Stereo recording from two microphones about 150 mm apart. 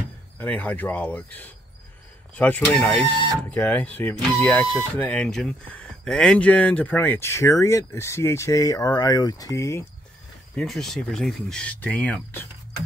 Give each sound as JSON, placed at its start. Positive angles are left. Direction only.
{"t": 0.4, "sound": "speech", "side_deg": 10}
{"t": 10.5, "sound": "speech", "side_deg": 5}